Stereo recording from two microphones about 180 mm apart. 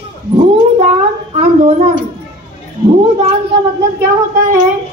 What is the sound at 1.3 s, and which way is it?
Speech, 40° right (ahead or behind).